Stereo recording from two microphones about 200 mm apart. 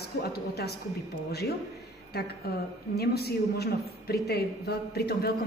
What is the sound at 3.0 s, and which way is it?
A woman's voice, 55° left (ahead or behind).